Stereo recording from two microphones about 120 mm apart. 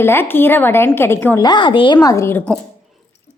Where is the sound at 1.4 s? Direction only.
40° left (ahead or behind).